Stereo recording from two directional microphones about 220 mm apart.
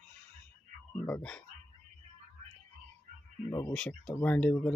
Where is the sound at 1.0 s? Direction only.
5° left (ahead or behind).